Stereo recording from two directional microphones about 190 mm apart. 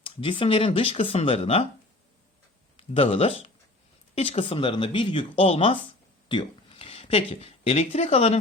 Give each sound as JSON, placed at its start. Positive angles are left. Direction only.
{"t": 0.0, "sound": "speech", "side_deg": 25}
{"t": 2.7, "sound": "speech", "side_deg": 30}